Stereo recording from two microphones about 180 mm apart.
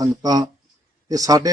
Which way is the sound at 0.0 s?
20° right (ahead or behind).